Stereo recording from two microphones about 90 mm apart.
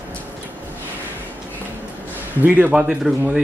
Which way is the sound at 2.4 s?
15° right (ahead or behind).